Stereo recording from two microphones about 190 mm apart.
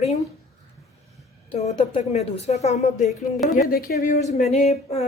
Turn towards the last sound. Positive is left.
turn(degrees=35)  # may be behind; listen again after turning